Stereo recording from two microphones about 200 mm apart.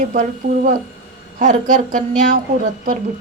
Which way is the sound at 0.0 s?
40° right (ahead or behind).